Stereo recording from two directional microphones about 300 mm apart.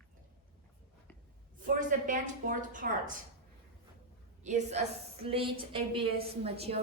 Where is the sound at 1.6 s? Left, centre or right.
Right.